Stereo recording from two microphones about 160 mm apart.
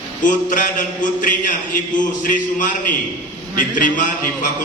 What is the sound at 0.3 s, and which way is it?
A man's voice, 55° left (ahead or behind).